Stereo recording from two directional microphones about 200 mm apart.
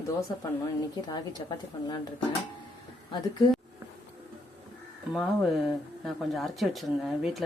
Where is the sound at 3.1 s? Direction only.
20° left (ahead or behind).